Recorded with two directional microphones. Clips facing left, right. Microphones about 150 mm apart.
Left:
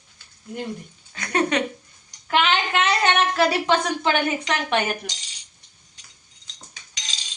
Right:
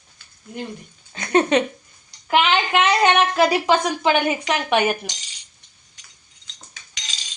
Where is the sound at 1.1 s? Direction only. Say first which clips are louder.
Right 5 dB; 25° right (ahead or behind).